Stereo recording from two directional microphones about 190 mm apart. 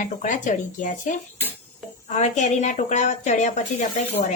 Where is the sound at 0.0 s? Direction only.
40° left (ahead or behind).